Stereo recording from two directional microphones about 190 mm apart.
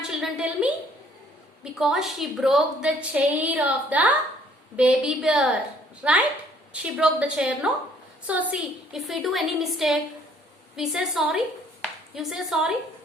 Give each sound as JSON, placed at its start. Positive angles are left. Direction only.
{"t": 0.1, "sound": "a woman's voice", "side_deg": -5}